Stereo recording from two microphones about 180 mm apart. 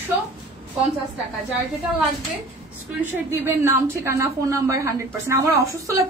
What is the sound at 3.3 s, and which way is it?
A woman's voice, 15° right (ahead or behind).